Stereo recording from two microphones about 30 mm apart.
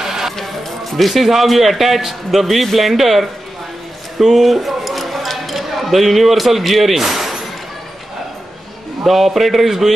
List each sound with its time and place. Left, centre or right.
0.0 s music: centre
0.4 s a man's voice: centre
4.2 s a sound: centre
9.0 s a man's voice: centre